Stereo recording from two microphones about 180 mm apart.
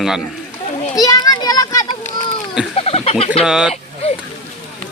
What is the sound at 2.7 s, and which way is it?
Fowl, 35° left (ahead or behind).